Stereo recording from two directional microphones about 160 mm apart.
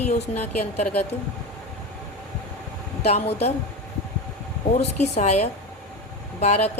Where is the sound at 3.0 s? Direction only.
40° left (ahead or behind).